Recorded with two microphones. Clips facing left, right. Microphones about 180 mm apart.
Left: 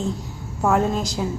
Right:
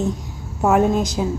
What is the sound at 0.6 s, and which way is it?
Speech, 20° right (ahead or behind).